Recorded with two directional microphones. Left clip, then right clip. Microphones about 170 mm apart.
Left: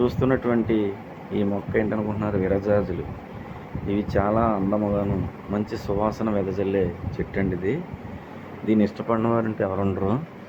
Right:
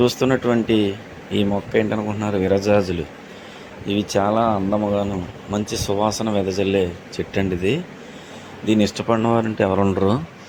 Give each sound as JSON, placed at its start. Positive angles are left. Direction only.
{"t": 0.0, "sound": "speech", "side_deg": -35}
{"t": 3.8, "sound": "speech", "side_deg": -25}
{"t": 8.6, "sound": "speech", "side_deg": -35}